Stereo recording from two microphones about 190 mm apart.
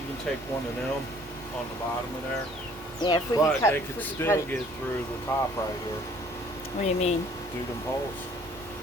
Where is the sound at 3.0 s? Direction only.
20° left (ahead or behind).